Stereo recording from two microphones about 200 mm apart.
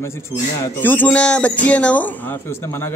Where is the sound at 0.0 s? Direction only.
15° left (ahead or behind).